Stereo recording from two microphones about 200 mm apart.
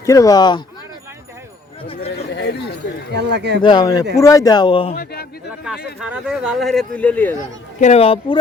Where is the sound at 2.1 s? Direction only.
55° left (ahead or behind).